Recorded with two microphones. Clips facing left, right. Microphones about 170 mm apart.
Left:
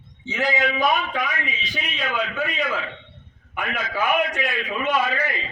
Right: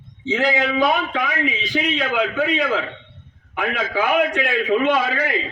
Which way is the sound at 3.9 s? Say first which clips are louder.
Right 3 dB; 60° right (ahead or behind).